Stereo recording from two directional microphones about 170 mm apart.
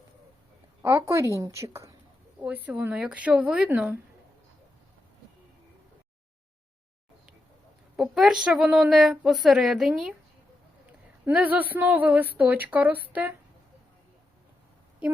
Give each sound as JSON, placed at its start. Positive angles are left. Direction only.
{"t": 0.8, "sound": "speech", "side_deg": -15}
{"t": 7.9, "sound": "a woman's voice", "side_deg": 0}
{"t": 11.3, "sound": "speech", "side_deg": -10}